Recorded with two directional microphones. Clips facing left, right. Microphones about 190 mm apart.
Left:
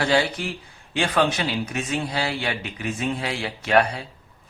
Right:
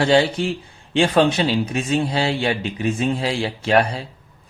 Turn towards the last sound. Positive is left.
turn(degrees=-30)  # may be behind; listen again after turning